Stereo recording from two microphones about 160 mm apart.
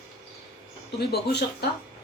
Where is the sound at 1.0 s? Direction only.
90° left.